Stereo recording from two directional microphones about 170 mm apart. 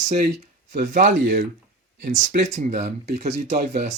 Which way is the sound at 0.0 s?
40° right (ahead or behind).